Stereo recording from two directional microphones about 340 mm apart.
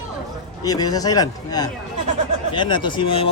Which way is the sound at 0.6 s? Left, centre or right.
Centre.